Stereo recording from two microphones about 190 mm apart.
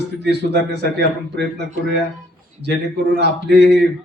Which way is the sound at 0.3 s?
60° right (ahead or behind).